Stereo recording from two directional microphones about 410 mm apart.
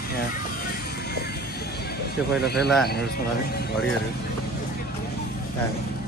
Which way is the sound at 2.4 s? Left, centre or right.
Left.